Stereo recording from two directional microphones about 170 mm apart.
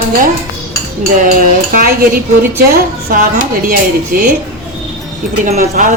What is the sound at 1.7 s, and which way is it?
A woman's voice, 55° right (ahead or behind).